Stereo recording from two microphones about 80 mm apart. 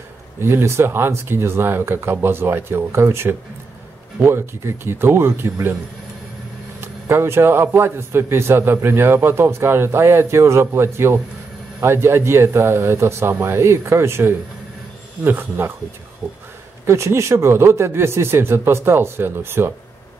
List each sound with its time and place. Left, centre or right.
0.4 s a man's voice: right
6.8 s a man's voice: right
16.8 s a man's voice: right